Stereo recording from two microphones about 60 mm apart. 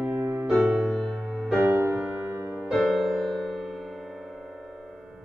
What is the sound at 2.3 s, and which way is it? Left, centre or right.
Music, right.